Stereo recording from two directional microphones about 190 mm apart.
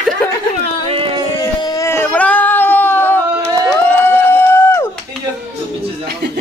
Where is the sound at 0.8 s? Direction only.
30° right (ahead or behind).